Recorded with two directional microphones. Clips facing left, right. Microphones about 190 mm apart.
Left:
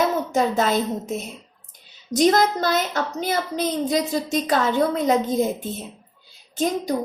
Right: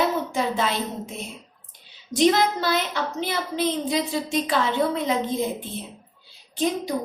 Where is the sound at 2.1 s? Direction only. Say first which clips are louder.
Left 2 dB; 45° left (ahead or behind).